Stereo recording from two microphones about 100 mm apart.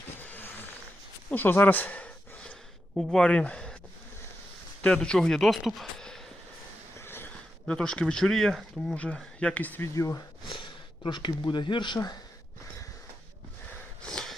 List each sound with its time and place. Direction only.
0.2 s a sound: 20° left (ahead or behind)
2.9 s speech: centre (ahead or behind)
4.8 s speech: 10° left (ahead or behind)
6.9 s a sound: 25° left (ahead or behind)
7.7 s speech: 10° left (ahead or behind)
9.9 s speech: 30° left (ahead or behind)
10.4 s speech: 55° left (ahead or behind)
14.0 s snort: 5° left (ahead or behind)